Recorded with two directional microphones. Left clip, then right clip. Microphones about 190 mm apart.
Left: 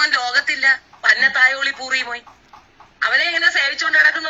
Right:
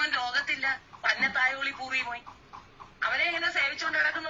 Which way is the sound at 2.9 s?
35° left (ahead or behind).